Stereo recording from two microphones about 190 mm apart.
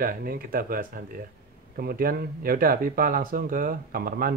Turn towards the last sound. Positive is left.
turn(degrees=-50)  # may be behind; listen again after turning